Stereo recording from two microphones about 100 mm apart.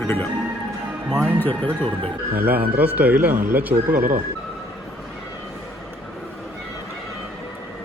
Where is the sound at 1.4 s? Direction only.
15° left (ahead or behind).